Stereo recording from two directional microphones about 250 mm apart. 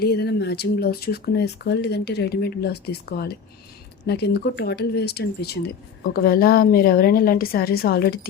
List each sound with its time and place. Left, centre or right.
0.0 s speech: left